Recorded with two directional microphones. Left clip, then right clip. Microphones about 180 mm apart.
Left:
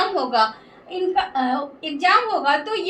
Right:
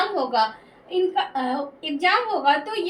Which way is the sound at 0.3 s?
20° left (ahead or behind).